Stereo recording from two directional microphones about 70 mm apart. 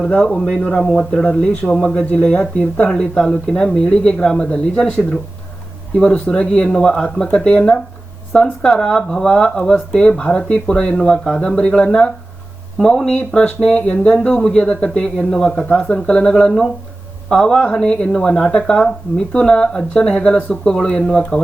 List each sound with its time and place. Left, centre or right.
0.2 s speech: centre
1.2 s speech: left
2.9 s speech: centre